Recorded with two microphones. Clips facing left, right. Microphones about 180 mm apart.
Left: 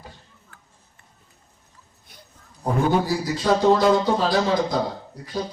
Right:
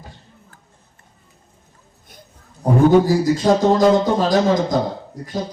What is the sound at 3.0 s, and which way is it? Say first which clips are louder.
A man's voice: right 8 dB; 45° right (ahead or behind).